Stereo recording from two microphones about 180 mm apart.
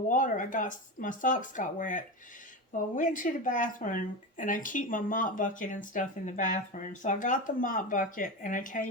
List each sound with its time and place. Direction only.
0.1 s speech: 45° left (ahead or behind)